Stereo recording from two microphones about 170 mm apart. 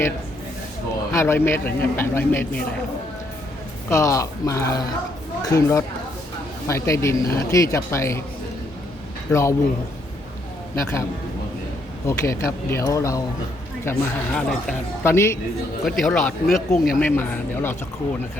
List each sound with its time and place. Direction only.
1.1 s speech: 15° left (ahead or behind)
3.8 s speech: 15° left (ahead or behind)
9.3 s speech: 15° left (ahead or behind)
12.0 s speech: 15° left (ahead or behind)
15.8 s speech: centre (ahead or behind)
17.0 s speech: 10° left (ahead or behind)